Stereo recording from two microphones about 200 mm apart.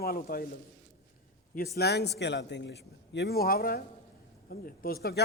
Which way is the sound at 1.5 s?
50° left (ahead or behind).